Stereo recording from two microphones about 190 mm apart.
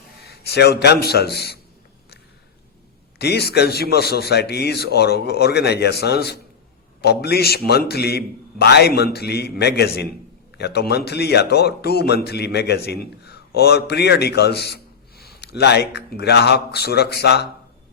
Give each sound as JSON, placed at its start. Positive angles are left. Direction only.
{"t": 0.3, "sound": "a man's voice", "side_deg": 60}
{"t": 3.2, "sound": "a man's voice", "side_deg": 60}